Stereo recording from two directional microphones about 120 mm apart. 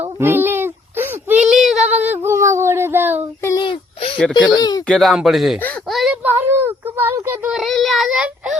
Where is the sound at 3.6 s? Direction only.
50° left (ahead or behind).